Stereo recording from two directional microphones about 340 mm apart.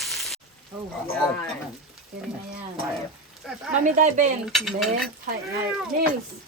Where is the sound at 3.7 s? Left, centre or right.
Right.